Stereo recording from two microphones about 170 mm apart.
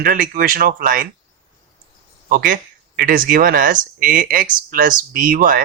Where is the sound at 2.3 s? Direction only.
55° right (ahead or behind).